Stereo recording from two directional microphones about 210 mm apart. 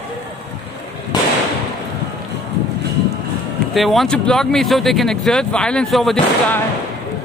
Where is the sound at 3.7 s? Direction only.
Centre (ahead or behind).